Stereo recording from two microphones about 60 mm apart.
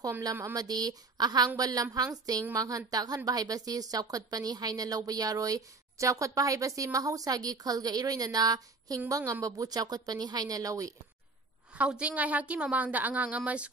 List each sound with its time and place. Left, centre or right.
0.2 s a woman's voice: right
9.1 s speech: right
12.0 s a woman's voice: right